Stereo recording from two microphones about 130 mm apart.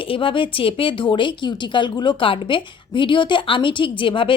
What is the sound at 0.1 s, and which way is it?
Speech, 40° left (ahead or behind).